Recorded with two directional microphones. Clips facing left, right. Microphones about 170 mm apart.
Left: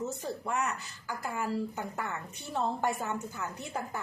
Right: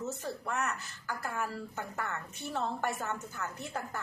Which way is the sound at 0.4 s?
15° left (ahead or behind).